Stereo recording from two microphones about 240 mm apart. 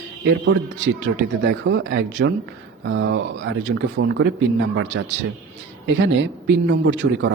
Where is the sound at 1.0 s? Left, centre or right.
Right.